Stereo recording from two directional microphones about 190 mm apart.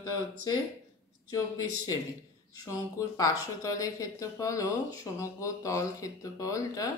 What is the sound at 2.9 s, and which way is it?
Speech, 15° left (ahead or behind).